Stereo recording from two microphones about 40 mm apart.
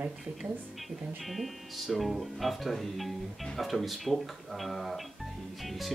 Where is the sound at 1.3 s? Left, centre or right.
Centre.